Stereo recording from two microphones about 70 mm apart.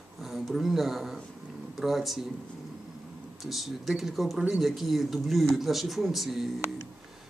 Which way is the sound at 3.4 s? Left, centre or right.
Centre.